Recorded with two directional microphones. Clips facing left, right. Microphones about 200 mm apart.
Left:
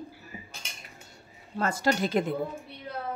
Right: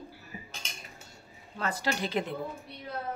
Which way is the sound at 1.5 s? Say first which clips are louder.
Left 5 dB; 45° left (ahead or behind).